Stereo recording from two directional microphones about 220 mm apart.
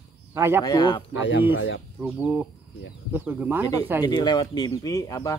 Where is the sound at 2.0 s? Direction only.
10° right (ahead or behind).